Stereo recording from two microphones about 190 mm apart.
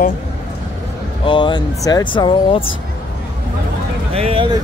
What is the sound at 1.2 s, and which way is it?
Speech, 25° left (ahead or behind).